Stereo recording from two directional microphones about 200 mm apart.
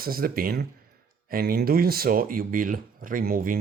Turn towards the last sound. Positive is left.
turn(degrees=-45)  # may be behind; listen again after turning